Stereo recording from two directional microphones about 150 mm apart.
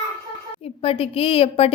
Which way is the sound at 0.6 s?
40° left (ahead or behind).